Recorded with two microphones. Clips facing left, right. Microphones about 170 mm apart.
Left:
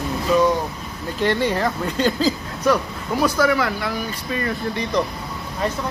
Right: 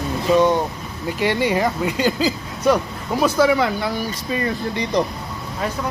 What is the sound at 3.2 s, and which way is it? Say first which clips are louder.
Speech: right 3 dB; 25° right (ahead or behind).